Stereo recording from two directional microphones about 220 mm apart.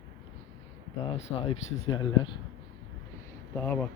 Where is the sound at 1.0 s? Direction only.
25° left (ahead or behind).